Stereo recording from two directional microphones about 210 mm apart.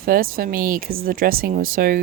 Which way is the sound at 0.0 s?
45° right (ahead or behind).